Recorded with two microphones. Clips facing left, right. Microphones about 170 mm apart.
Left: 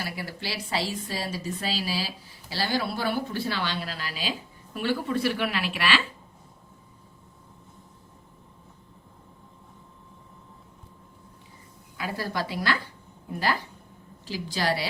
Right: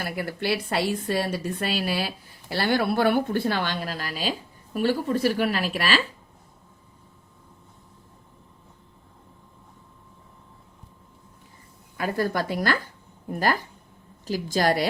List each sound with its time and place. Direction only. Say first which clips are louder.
0.0 s speech: right 6 dB; 55° right (ahead or behind)
11.9 s speech: right 5 dB; 50° right (ahead or behind)